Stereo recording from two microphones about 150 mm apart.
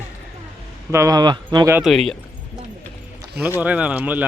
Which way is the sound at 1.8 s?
Centre (ahead or behind).